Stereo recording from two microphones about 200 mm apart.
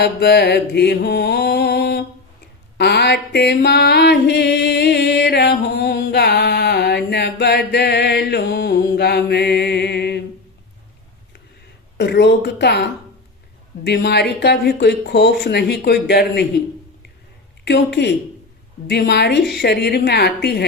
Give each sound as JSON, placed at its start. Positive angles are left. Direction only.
{"t": 0.0, "sound": "mantra", "side_deg": 55}
{"t": 2.7, "sound": "music", "side_deg": 55}
{"t": 11.9, "sound": "a woman's voice", "side_deg": 60}
{"t": 17.7, "sound": "speech", "side_deg": 55}
{"t": 19.4, "sound": "a woman's voice", "side_deg": 0}
{"t": 19.6, "sound": "mantra", "side_deg": 55}